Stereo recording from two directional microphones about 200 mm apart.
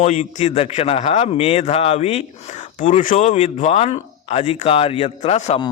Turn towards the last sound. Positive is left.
turn(degrees=35)  # may be behind; listen again after turning